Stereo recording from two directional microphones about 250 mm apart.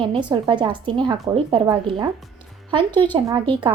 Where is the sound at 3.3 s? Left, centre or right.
Centre.